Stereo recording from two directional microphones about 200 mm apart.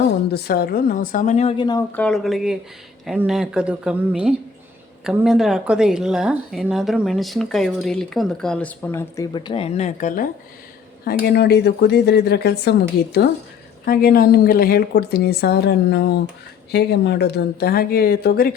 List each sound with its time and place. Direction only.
0.3 s a woman's voice: 50° left (ahead or behind); by 1.8 s 20° left (ahead or behind)
1.9 s a woman's voice: 5° left (ahead or behind); by 10.2 s 40° left (ahead or behind)
11.0 s speech: 50° left (ahead or behind)
13.8 s a woman's voice: 50° left (ahead or behind)